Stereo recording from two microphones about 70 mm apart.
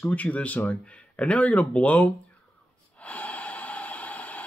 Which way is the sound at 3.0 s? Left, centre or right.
Left.